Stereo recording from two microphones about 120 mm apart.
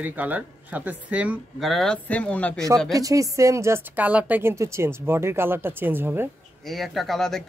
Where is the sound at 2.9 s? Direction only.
30° right (ahead or behind).